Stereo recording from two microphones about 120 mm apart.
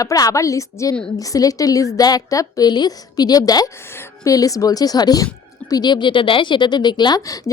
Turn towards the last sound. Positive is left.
turn(degrees=35)  # may be behind; listen again after turning